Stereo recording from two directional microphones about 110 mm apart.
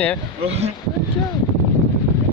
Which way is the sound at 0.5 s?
70° right (ahead or behind).